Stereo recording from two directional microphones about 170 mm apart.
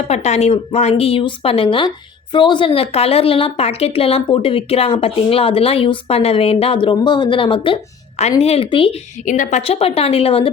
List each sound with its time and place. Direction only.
0.1 s a woman's voice: 40° left (ahead or behind)
9.2 s a woman's voice: 50° left (ahead or behind)